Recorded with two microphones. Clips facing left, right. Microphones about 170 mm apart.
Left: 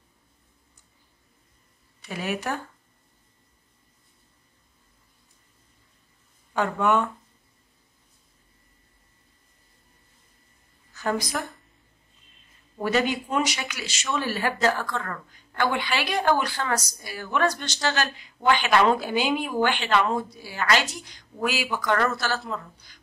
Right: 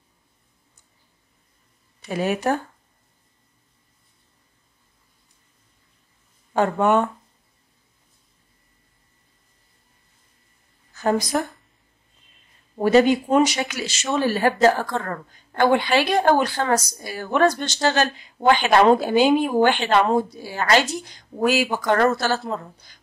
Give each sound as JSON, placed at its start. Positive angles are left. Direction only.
{"t": 2.0, "sound": "a woman's voice", "side_deg": -40}
{"t": 6.6, "sound": "a woman's voice", "side_deg": -35}
{"t": 11.3, "sound": "a woman's voice", "side_deg": -35}
{"t": 12.7, "sound": "a woman's voice", "side_deg": -40}